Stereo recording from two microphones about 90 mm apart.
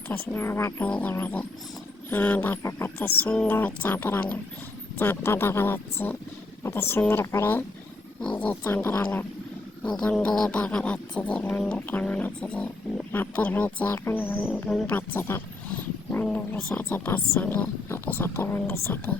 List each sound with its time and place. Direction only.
0.1 s speech: 25° left (ahead or behind)
0.9 s speech: 15° left (ahead or behind)
8.2 s speech: 15° left (ahead or behind)
8.6 s speech: 25° left (ahead or behind)
10.2 s speech: 5° left (ahead or behind); by 14.3 s 20° left (ahead or behind)
14.5 s speech: 10° left (ahead or behind)
14.9 s speech: 25° left (ahead or behind)